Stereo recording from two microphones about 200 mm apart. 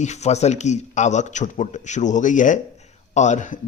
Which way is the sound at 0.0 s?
35° left (ahead or behind).